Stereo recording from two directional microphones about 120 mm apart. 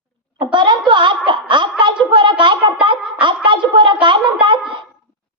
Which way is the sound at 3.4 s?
40° right (ahead or behind).